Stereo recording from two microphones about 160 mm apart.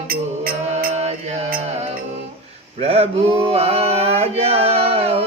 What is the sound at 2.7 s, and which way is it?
Male singing, 40° right (ahead or behind).